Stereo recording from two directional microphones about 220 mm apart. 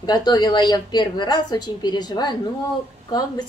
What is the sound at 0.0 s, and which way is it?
A woman's voice, 20° left (ahead or behind).